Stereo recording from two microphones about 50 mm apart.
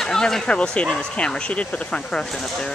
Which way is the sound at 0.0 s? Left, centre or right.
Centre.